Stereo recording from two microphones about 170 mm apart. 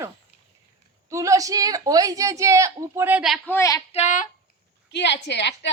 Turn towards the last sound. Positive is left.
turn(degrees=90)